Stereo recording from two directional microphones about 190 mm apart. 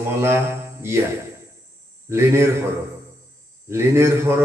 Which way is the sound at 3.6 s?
15° right (ahead or behind).